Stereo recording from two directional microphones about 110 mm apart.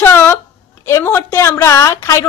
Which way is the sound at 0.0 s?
20° left (ahead or behind).